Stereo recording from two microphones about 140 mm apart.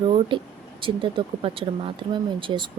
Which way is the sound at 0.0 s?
40° right (ahead or behind).